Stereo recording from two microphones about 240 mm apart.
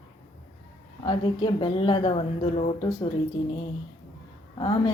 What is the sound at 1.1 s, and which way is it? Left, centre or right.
A woman's voice, centre.